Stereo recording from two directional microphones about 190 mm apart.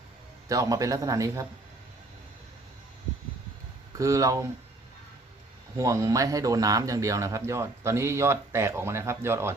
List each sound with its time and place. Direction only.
0.4 s speech: 20° right (ahead or behind)
3.9 s speech: 15° right (ahead or behind)
5.7 s speech: 15° right (ahead or behind)